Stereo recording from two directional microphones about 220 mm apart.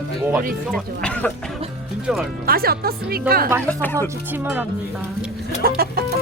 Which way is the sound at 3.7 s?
5° left (ahead or behind).